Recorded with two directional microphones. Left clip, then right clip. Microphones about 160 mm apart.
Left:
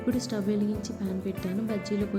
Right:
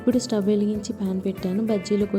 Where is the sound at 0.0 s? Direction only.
30° right (ahead or behind).